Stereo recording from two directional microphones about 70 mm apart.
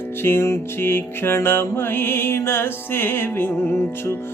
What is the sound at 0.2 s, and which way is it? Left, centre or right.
Music, left.